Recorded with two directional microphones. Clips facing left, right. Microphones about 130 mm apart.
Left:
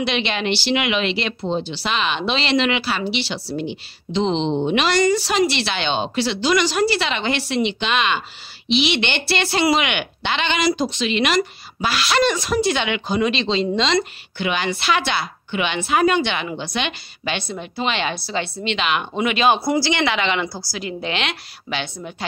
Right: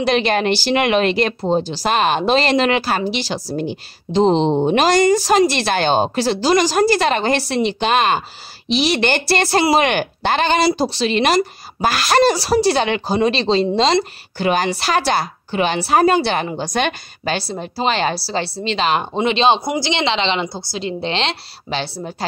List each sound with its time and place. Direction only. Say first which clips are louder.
0.0 s a woman's voice: right 6 dB; 45° right (ahead or behind)